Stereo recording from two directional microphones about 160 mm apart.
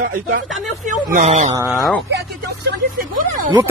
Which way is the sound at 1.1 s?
45° right (ahead or behind).